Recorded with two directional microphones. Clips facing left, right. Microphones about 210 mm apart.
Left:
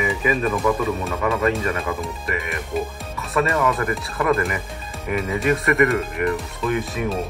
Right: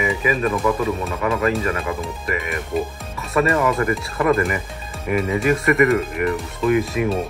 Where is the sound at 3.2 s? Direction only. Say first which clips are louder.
Right 3 dB; centre (ahead or behind).